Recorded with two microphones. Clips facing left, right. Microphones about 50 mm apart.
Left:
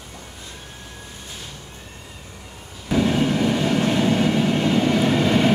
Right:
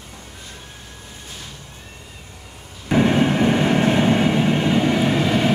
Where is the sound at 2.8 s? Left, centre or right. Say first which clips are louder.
Right 3 dB; right.